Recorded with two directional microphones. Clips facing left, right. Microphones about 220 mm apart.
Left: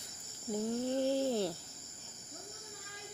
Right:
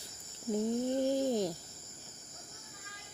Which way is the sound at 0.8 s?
15° right (ahead or behind).